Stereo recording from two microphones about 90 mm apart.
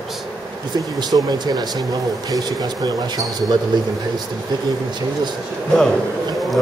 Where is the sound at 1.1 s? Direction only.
50° right (ahead or behind).